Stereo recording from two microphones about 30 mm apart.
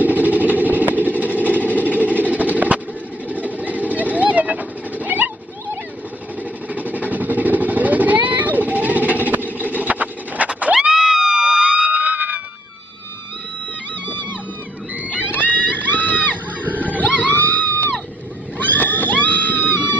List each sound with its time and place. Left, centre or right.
0.0 s vehicle: right
1.2 s engine: right
1.7 s vehicle: left
2.0 s vehicle: right
6.7 s vehicle: right
9.8 s a sound: right
10.9 s music: centre
11.9 s screaming: right
15.3 s run: left
16.6 s a sound: right
17.2 s music: left
18.6 s a sound: left